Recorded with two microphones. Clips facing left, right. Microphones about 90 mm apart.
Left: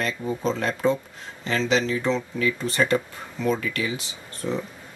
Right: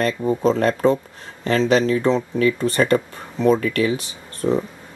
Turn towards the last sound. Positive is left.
turn(degrees=-50)  # may be behind; listen again after turning